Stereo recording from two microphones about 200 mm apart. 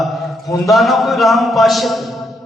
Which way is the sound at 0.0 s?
Centre (ahead or behind).